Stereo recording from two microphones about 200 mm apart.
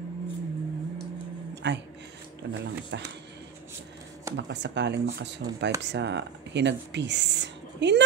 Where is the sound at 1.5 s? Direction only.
60° right (ahead or behind).